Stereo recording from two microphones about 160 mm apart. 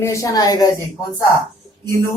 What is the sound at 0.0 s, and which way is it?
Speech, 20° left (ahead or behind).